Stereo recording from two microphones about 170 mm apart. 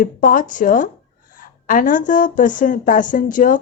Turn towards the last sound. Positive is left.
turn(degrees=50)  # may be behind; listen again after turning